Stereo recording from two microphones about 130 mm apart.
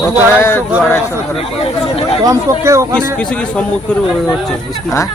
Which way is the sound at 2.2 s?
25° right (ahead or behind).